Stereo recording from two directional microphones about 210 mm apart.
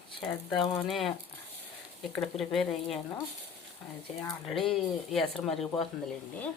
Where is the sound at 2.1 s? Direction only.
Centre (ahead or behind).